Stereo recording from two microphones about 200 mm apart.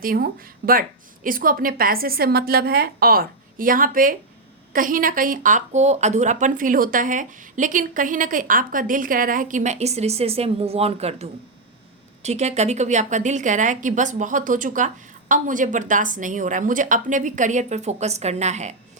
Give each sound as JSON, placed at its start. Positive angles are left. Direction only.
{"t": 0.0, "sound": "speech", "side_deg": -45}